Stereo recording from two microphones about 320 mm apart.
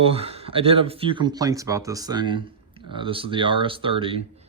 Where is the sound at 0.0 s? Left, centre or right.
Centre.